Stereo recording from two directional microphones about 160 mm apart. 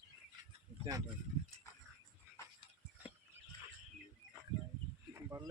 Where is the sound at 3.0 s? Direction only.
10° right (ahead or behind).